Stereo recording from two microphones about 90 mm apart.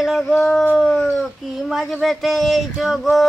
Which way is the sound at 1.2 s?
Centre (ahead or behind).